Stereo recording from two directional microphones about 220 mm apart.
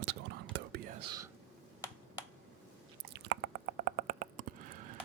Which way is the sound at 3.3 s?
50° right (ahead or behind).